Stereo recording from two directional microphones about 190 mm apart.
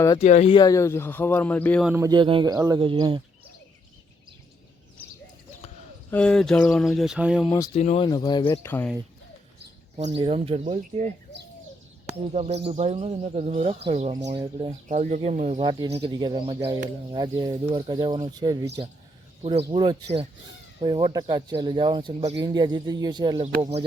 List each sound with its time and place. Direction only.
0.2 s speech: 35° left (ahead or behind)
0.5 s speech: 20° left (ahead or behind)
1.8 s speech: 10° right (ahead or behind)
2.0 s speech: 25° right (ahead or behind)
6.1 s speech: 5° left (ahead or behind)
7.8 s speech: 30° left (ahead or behind)
8.6 s speech: 10° left (ahead or behind)
10.2 s speech: 30° right (ahead or behind)
12.3 s speech: 35° right (ahead or behind)